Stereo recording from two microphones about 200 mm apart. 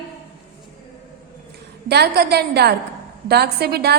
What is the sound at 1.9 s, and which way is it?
A woman's voice, 55° right (ahead or behind).